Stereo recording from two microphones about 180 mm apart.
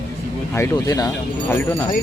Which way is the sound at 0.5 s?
15° left (ahead or behind).